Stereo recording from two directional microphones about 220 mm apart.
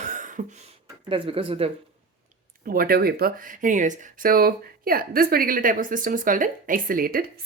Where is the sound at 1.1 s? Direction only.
25° right (ahead or behind).